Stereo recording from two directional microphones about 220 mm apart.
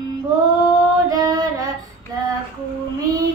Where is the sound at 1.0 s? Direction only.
15° right (ahead or behind).